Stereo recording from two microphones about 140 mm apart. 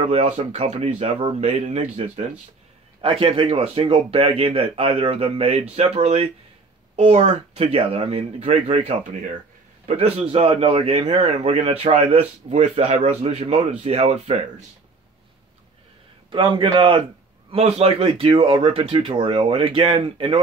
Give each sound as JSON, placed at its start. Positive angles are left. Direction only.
{"t": 0.0, "sound": "a man's voice", "side_deg": -45}
{"t": 3.0, "sound": "a man's voice", "side_deg": -40}
{"t": 16.3, "sound": "a man's voice", "side_deg": -35}